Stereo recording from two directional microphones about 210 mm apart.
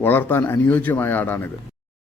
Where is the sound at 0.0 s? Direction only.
10° left (ahead or behind).